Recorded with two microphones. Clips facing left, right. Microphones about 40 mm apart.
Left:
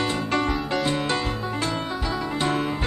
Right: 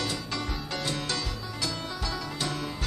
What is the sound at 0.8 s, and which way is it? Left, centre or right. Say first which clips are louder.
Music: left 8 dB; left.